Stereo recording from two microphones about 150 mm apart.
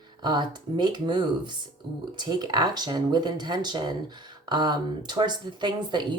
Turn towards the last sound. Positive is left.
turn(degrees=-30)  # may be behind; listen again after turning